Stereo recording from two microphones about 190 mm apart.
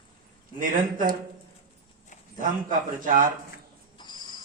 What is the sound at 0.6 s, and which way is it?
Speech, 45° right (ahead or behind).